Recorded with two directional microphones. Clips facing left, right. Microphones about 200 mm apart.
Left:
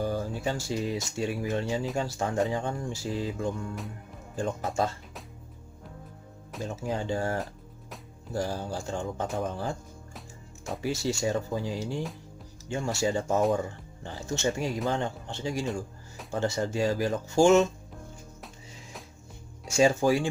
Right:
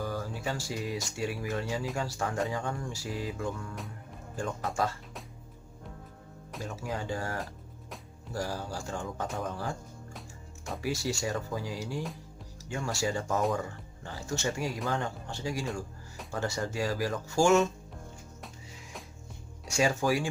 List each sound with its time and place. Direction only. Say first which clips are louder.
0.0 s speech: left 5 dB; 25° left (ahead or behind)
6.6 s speech: left 4 dB; 25° left (ahead or behind)
10.1 s music: even; centre (ahead or behind)
10.8 s speech: left 3 dB; 25° left (ahead or behind)
19.7 s speech: left 5 dB; 25° left (ahead or behind)